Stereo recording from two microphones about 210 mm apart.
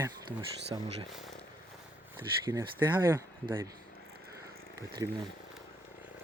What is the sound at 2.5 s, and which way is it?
Speech, 15° right (ahead or behind).